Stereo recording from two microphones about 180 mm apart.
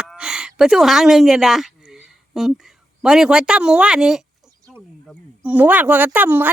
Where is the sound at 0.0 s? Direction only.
5° right (ahead or behind).